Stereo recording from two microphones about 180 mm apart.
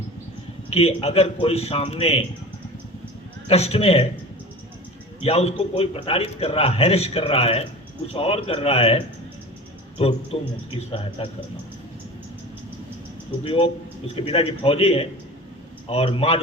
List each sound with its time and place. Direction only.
0.7 s a man's voice: 35° left (ahead or behind)
3.5 s a man's voice: 35° left (ahead or behind)
5.2 s a man's voice: 35° left (ahead or behind)
13.4 s a man's voice: 30° left (ahead or behind)